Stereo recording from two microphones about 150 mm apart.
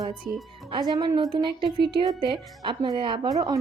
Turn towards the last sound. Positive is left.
turn(degrees=-25)  # may be behind; listen again after turning